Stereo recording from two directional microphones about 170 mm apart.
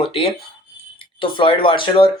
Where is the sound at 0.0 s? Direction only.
30° left (ahead or behind).